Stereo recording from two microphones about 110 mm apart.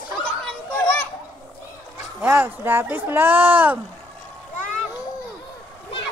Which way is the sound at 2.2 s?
15° right (ahead or behind).